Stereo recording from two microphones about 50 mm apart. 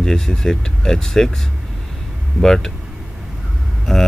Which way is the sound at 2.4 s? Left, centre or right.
Centre.